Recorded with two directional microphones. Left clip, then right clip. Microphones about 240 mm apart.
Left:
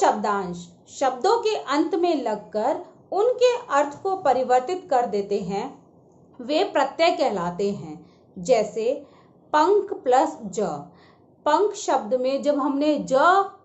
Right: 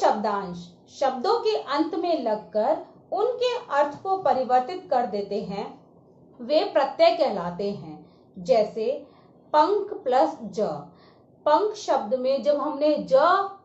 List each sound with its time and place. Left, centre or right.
0.0 s a woman's voice: left